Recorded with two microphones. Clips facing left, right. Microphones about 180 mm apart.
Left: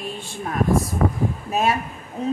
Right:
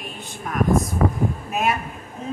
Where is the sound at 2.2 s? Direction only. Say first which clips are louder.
Left 6 dB; 35° left (ahead or behind).